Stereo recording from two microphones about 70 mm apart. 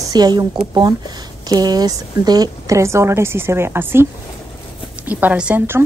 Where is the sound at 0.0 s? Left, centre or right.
Right.